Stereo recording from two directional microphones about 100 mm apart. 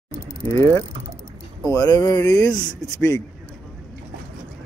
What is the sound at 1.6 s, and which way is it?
Speech, 35° left (ahead or behind).